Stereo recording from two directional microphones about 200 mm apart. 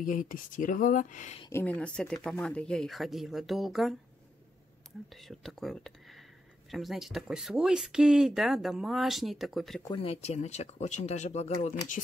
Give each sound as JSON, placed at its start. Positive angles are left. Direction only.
{"t": 0.0, "sound": "speech", "side_deg": 40}
{"t": 1.5, "sound": "speech", "side_deg": 10}
{"t": 5.1, "sound": "speech", "side_deg": 0}
{"t": 9.9, "sound": "speech", "side_deg": 30}